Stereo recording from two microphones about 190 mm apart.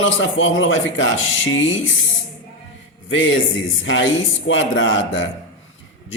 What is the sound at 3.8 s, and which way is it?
A man's voice, 80° left.